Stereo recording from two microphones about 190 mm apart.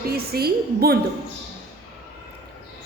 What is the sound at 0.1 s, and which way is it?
Speech, 55° right (ahead or behind).